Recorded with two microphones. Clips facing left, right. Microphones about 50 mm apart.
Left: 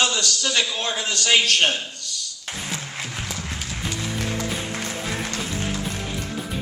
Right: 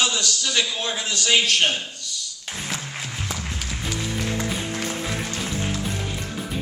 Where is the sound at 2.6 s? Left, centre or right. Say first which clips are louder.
Even; centre.